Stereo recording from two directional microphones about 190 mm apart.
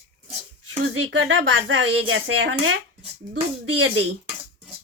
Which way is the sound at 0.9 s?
85° right.